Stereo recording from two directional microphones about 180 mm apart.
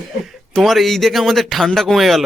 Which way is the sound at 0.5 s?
Centre (ahead or behind).